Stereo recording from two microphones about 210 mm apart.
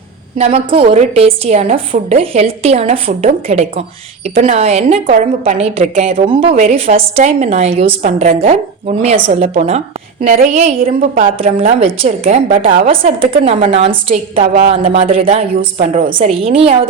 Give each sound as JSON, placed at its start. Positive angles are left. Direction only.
{"t": 0.3, "sound": "a woman's voice", "side_deg": -30}
{"t": 10.2, "sound": "a woman's voice", "side_deg": -40}
{"t": 12.9, "sound": "a woman's voice", "side_deg": -25}